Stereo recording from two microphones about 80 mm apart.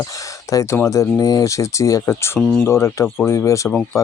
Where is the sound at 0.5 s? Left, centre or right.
Left.